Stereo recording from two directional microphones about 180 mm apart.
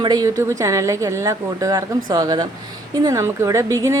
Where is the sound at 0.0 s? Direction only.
20° right (ahead or behind).